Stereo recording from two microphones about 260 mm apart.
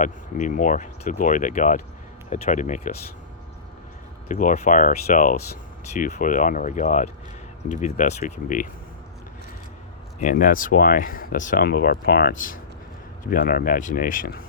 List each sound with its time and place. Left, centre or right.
0.0 s speech: left
4.3 s speech: left
10.2 s speech: left